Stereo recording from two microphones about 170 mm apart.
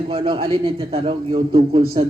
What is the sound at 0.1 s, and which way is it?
A man's voice, 35° right (ahead or behind).